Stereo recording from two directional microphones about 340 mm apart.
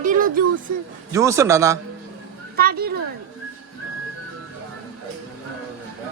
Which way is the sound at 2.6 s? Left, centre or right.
Right.